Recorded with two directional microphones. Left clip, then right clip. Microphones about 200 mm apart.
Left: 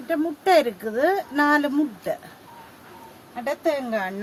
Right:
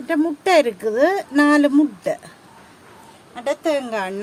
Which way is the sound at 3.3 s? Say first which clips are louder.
Right 3 dB; 40° right (ahead or behind).